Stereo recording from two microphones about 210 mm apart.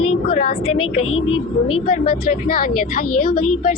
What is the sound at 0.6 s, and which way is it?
Speech, 25° left (ahead or behind).